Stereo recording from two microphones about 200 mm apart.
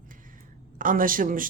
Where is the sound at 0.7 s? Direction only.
45° right (ahead or behind).